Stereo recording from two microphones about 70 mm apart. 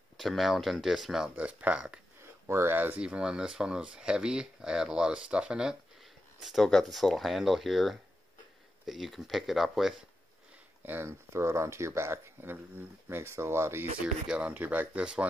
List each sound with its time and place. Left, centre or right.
0.2 s speech: centre
1.3 s speech: centre
2.4 s speech: right
3.0 s speech: centre
6.4 s speech: centre
10.8 s speech: right
14.2 s speech: centre
14.5 s speech: right